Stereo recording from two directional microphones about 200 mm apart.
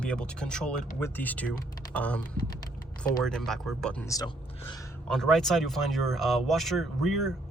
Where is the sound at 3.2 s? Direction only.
Centre (ahead or behind); by 4.8 s 20° left (ahead or behind).